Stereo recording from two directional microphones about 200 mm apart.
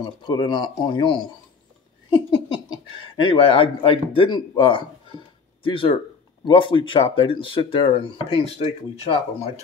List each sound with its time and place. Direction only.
0.0 s speech: 20° left (ahead or behind)
2.0 s a sound: 25° left (ahead or behind)
3.2 s speech: 25° left (ahead or behind)